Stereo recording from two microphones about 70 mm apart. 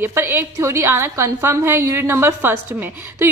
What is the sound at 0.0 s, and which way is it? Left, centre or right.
A woman's voice, right.